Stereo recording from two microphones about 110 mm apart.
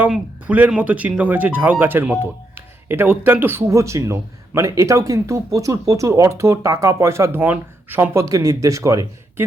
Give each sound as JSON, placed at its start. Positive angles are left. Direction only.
{"t": 0.0, "sound": "speech", "side_deg": -15}